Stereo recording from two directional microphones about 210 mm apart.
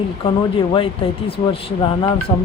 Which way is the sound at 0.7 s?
25° left (ahead or behind).